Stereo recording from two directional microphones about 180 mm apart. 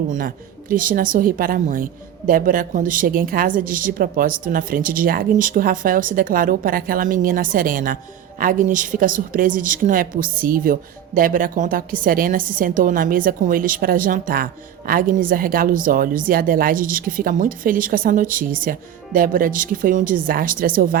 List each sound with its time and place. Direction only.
0.1 s a woman's voice: 50° right (ahead or behind)